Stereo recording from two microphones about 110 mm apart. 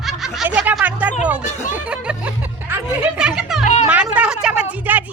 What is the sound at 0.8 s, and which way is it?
Music, 15° right (ahead or behind).